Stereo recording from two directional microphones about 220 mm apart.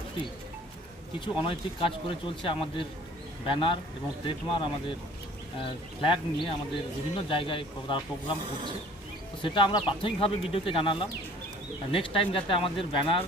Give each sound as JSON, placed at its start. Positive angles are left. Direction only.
{"t": 1.2, "sound": "speech", "side_deg": 25}
{"t": 9.4, "sound": "speech", "side_deg": 25}